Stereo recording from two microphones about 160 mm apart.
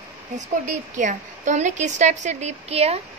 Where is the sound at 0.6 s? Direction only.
50° right (ahead or behind).